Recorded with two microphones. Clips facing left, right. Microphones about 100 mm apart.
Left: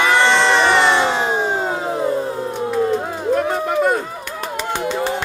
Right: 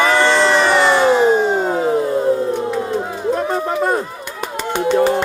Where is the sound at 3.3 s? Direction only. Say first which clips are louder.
Left 1 dB; 30° right (ahead or behind).